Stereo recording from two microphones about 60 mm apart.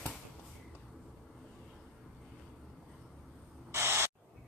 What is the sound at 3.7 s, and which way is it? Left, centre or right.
Spray, right.